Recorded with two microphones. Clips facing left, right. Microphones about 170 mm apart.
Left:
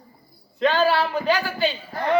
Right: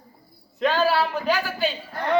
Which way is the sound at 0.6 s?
5° right (ahead or behind).